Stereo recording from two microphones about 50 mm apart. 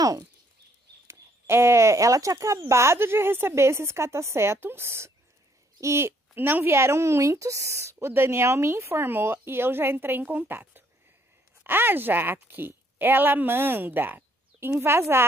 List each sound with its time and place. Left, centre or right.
1.0 s speech: right
6.3 s a woman's voice: right
14.8 s speech: right